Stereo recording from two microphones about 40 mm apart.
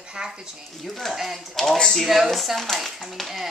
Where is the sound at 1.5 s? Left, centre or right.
Centre.